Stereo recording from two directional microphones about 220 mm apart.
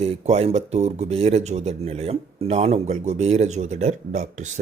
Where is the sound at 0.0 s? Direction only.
30° right (ahead or behind).